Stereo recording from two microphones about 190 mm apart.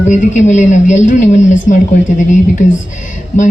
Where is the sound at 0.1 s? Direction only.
40° left (ahead or behind).